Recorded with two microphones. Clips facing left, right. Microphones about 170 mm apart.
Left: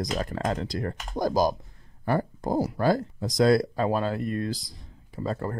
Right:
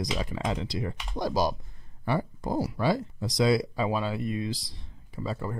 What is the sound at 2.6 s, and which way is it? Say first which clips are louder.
Speech: left 3 dB; 50° left (ahead or behind).